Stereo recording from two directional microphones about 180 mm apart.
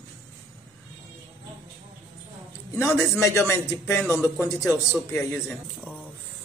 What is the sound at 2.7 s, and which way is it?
Speech, 10° left (ahead or behind).